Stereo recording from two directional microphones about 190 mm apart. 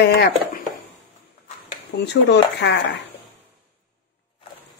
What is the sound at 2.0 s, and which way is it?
Speech, 65° left (ahead or behind).